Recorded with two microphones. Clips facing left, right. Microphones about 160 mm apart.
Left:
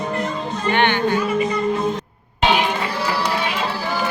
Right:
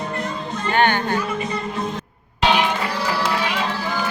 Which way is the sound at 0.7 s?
45° right (ahead or behind).